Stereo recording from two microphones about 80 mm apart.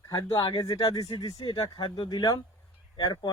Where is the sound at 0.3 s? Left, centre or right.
Left.